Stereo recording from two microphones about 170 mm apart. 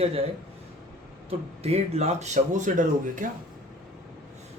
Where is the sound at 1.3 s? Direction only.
35° right (ahead or behind).